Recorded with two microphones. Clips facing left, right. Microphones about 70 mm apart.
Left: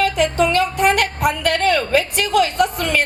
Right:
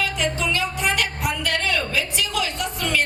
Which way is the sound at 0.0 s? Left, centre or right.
Left.